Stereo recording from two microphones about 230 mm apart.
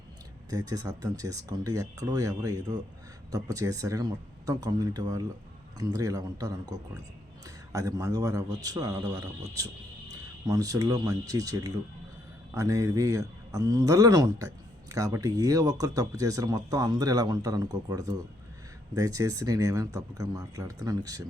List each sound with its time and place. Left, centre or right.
0.5 s speech: centre